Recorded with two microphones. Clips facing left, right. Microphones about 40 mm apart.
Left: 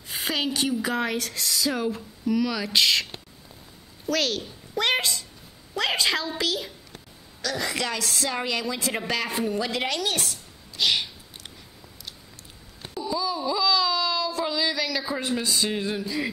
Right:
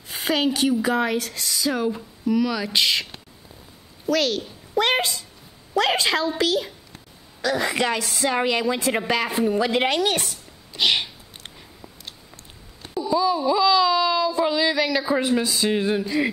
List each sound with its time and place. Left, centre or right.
0.1 s a woman's voice: centre
7.4 s a woman's voice: right
8.0 s a woman's voice: centre
8.3 s a woman's voice: right
9.7 s a woman's voice: right
10.7 s sneeze: right
13.1 s baby cry: centre
13.4 s speech: centre
15.2 s a woman's voice: centre
15.7 s a woman's voice: centre